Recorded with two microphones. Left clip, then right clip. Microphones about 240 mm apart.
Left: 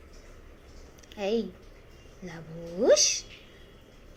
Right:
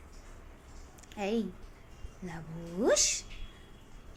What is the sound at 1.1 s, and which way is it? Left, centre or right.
A woman's voice, right.